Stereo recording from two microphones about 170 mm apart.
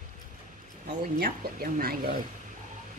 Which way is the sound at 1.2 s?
55° right (ahead or behind).